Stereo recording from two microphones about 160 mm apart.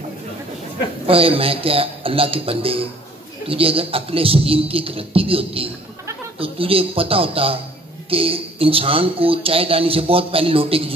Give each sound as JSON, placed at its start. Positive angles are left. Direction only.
{"t": 1.0, "sound": "speech", "side_deg": -35}